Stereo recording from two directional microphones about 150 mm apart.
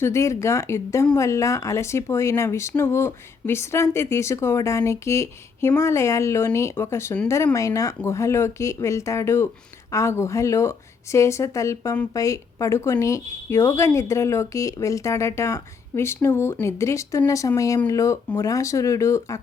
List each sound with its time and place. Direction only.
0.0 s speech: 20° left (ahead or behind)